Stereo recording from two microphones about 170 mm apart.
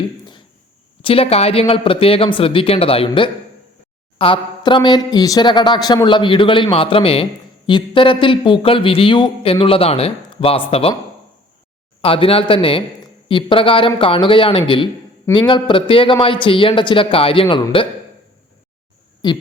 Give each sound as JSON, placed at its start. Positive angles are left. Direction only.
{"t": 1.0, "sound": "speech", "side_deg": 35}
{"t": 12.0, "sound": "speech", "side_deg": 35}
{"t": 19.2, "sound": "speech", "side_deg": 25}